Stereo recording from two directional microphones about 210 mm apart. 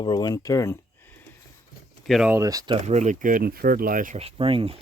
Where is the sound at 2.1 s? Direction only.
5° right (ahead or behind).